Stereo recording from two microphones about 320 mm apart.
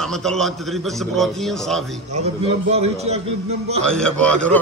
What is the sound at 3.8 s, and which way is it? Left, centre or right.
Speech, centre.